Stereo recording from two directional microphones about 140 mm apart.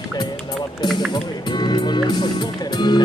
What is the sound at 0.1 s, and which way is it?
Music, 30° left (ahead or behind).